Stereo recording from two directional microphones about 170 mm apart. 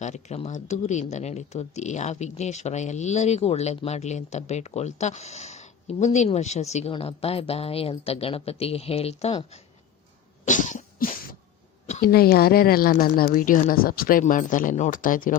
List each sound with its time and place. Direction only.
0.0 s speech: 40° left (ahead or behind)
10.4 s cough: 45° left (ahead or behind)
11.9 s a woman's voice: 55° left (ahead or behind)